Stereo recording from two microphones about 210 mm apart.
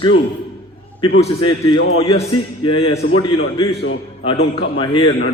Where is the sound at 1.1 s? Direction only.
30° left (ahead or behind).